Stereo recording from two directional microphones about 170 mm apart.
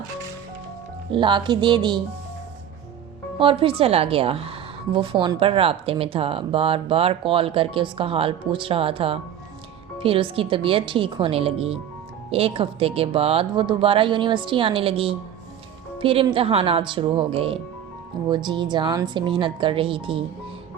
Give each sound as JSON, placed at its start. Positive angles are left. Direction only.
{"t": 1.1, "sound": "speech", "side_deg": -30}
{"t": 3.3, "sound": "a woman's voice", "side_deg": -30}